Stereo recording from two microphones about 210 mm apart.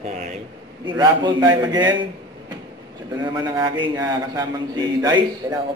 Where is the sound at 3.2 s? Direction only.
20° right (ahead or behind).